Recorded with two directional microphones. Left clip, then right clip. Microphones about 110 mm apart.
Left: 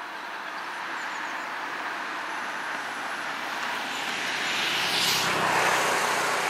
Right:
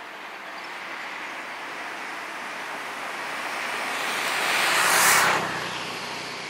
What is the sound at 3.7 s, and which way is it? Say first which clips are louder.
Vehicle: right 3 dB; 30° right (ahead or behind).